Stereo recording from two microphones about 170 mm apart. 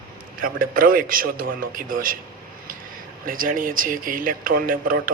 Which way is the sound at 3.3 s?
55° right (ahead or behind).